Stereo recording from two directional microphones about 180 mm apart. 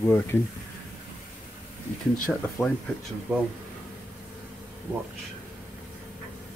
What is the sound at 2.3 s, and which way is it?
Speech, 5° right (ahead or behind).